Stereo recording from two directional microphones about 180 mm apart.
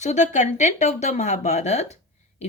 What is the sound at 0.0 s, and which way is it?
Speech, 40° left (ahead or behind).